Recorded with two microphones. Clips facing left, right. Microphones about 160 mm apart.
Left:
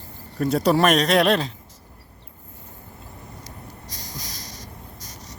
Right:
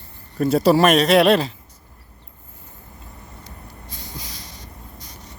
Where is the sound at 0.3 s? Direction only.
5° right (ahead or behind).